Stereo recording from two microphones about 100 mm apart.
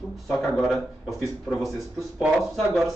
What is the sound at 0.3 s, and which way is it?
Speech, centre (ahead or behind).